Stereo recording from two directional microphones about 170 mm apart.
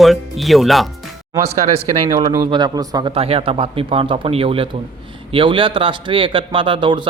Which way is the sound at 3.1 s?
35° right (ahead or behind).